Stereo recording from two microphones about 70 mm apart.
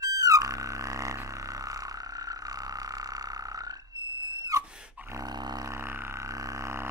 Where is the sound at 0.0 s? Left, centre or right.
Right.